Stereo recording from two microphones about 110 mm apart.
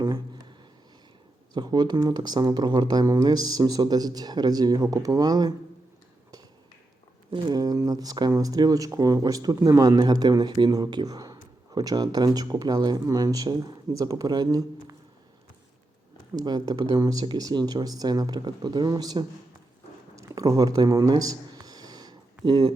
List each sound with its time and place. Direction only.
0.0 s a sound: 30° right (ahead or behind)
1.5 s speech: 40° right (ahead or behind)
7.5 s speech: 35° right (ahead or behind)
16.3 s speech: 40° right (ahead or behind)
20.1 s a sound: 30° right (ahead or behind)
22.4 s speech: 40° right (ahead or behind)